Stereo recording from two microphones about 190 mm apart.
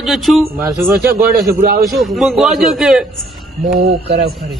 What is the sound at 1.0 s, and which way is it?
Speech, 50° right (ahead or behind).